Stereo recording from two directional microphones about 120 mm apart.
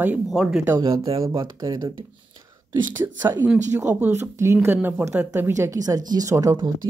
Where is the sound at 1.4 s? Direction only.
35° right (ahead or behind).